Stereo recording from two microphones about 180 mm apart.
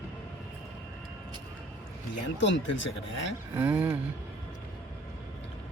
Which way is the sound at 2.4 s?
90° left.